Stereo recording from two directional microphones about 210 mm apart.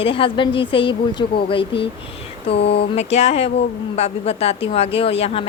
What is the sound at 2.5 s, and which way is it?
Speech, 55° left (ahead or behind).